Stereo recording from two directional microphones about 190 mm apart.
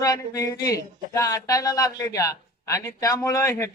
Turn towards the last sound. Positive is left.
turn(degrees=15)  # may be behind; listen again after turning